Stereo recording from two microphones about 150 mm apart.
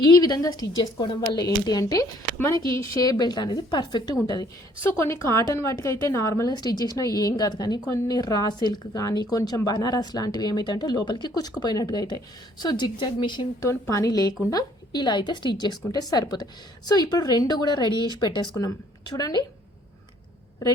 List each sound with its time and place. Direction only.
0.0 s a woman's voice: 25° left (ahead or behind)